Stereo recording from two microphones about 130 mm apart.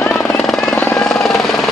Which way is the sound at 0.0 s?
15° left (ahead or behind).